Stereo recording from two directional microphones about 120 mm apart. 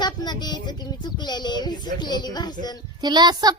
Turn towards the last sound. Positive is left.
turn(degrees=-35)  # may be behind; listen again after turning